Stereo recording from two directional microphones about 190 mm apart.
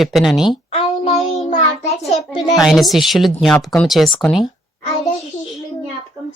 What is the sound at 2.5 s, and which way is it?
Speech, centre (ahead or behind).